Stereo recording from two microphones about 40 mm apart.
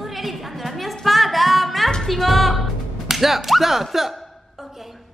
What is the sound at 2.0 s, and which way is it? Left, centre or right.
Music, centre.